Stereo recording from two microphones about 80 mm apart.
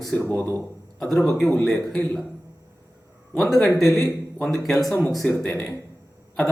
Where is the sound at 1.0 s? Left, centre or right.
Centre.